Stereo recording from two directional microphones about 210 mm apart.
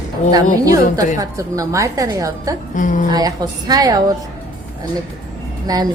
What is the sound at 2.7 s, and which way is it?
Speech, 40° left (ahead or behind).